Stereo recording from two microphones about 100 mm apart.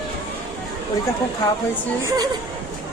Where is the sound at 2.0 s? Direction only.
40° right (ahead or behind).